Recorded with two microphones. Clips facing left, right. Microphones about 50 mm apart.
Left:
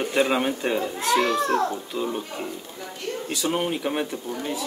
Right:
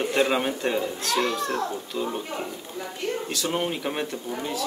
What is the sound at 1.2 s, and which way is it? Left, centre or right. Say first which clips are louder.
Speech: left 4 dB; left.